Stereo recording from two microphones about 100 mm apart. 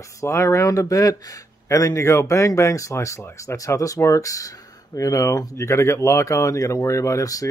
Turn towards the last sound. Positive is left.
turn(degrees=35)  # may be behind; listen again after turning